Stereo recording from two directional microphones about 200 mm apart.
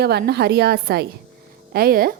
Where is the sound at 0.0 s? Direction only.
55° right (ahead or behind).